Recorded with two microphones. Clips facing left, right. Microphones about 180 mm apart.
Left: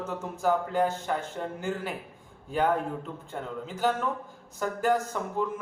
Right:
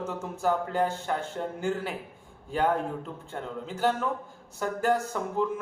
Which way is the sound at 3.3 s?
Centre (ahead or behind).